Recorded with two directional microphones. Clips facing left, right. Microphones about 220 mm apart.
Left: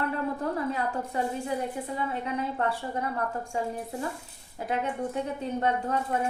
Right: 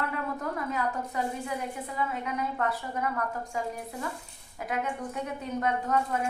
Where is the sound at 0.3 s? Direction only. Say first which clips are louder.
Left 3 dB; 30° left (ahead or behind).